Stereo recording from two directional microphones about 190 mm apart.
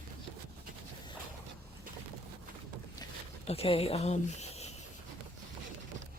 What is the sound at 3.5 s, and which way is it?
Speech, 30° left (ahead or behind).